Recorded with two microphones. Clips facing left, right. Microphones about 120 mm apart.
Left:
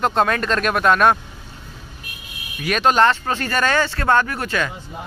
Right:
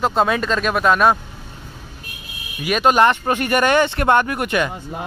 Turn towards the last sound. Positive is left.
turn(degrees=-15)  # may be behind; listen again after turning